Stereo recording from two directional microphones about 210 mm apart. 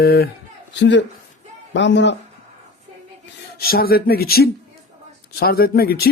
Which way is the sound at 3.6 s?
45° left (ahead or behind).